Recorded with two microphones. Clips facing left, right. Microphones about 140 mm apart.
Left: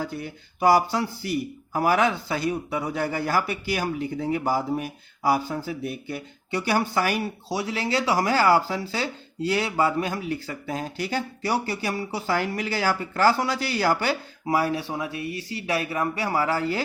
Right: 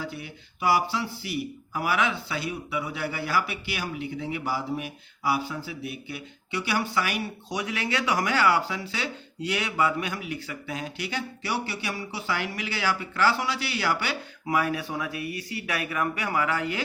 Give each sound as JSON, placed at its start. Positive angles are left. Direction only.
{"t": 0.0, "sound": "speech", "side_deg": 45}